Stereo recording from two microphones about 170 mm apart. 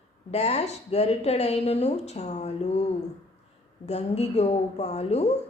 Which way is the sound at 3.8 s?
40° left (ahead or behind).